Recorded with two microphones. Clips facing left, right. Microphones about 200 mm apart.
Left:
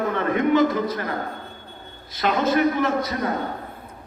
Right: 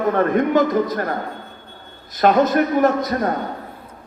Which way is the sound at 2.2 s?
45° right (ahead or behind).